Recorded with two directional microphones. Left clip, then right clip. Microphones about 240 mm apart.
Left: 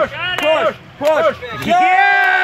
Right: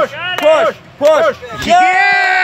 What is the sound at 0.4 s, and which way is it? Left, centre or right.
Speech, right.